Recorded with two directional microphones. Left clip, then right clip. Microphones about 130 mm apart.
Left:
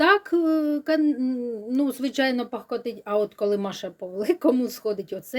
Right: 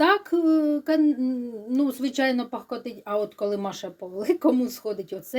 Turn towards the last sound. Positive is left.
turn(degrees=45)  # may be behind; listen again after turning